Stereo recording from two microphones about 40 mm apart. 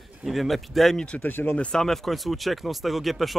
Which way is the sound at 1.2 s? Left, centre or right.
Left.